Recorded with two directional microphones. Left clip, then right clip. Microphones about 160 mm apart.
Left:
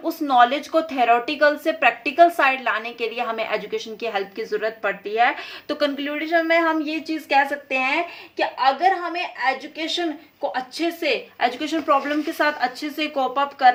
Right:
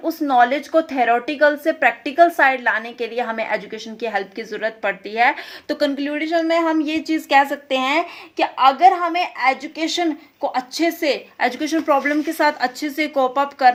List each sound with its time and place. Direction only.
0.0 s a woman's voice: 20° right (ahead or behind)